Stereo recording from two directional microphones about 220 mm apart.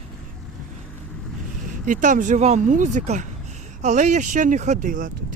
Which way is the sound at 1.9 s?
35° right (ahead or behind).